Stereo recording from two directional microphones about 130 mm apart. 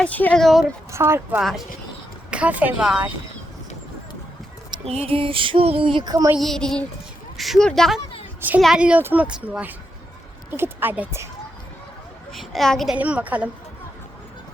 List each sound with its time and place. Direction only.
0.0 s speech: 10° left (ahead or behind)
0.9 s speech: 20° right (ahead or behind)
1.4 s speech: 5° right (ahead or behind)
4.9 s female singing: 50° right (ahead or behind); by 6.3 s 30° right (ahead or behind)
6.4 s speech: 5° left (ahead or behind)
8.4 s a woman's voice: 15° right (ahead or behind)
12.3 s a woman's voice: centre (ahead or behind)
13.0 s speech: 10° right (ahead or behind)